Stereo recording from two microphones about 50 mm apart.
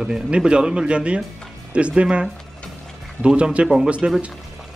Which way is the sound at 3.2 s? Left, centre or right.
Right.